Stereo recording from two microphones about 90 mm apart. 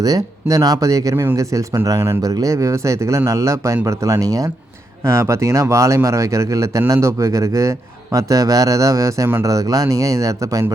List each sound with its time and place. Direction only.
0.0 s speech: 40° right (ahead or behind)
1.1 s speech: 30° right (ahead or behind)